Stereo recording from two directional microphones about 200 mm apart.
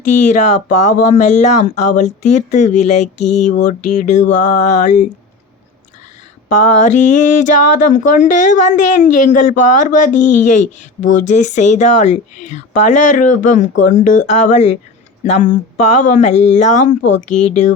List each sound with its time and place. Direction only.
0.0 s speech: 35° left (ahead or behind)
6.5 s speech: 40° left (ahead or behind)